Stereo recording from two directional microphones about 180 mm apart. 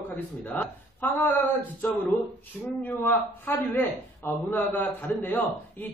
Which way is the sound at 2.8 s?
10° left (ahead or behind).